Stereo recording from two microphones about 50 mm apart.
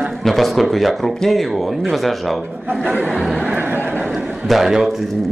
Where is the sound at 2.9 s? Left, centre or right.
Right.